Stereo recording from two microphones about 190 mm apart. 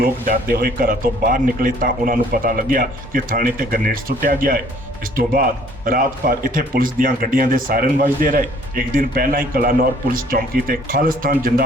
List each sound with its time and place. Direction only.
0.0 s speech: 50° right (ahead or behind)